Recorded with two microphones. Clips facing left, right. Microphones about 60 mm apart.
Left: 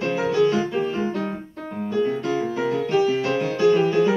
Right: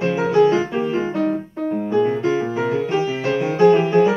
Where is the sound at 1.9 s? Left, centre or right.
Right.